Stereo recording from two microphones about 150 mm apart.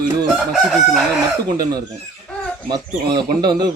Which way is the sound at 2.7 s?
30° right (ahead or behind).